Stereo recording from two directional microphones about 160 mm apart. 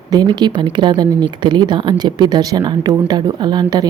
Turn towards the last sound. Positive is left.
turn(degrees=-25)  # may be behind; listen again after turning